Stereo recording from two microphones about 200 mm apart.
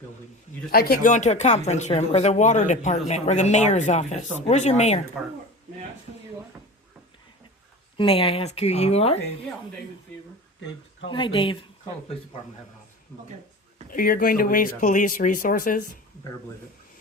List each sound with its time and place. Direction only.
0.7 s speech: 50° left (ahead or behind)
7.9 s speech: 25° left (ahead or behind)
11.1 s speech: 25° left (ahead or behind)
13.9 s speech: 45° left (ahead or behind)